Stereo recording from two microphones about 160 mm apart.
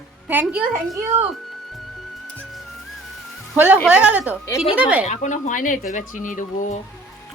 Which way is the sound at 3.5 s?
10° right (ahead or behind).